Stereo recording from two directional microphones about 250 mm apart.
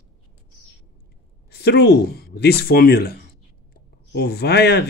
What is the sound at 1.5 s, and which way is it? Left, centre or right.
A woman's voice, left.